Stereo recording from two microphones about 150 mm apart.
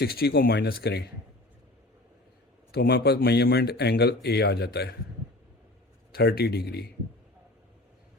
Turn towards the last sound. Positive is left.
turn(degrees=90)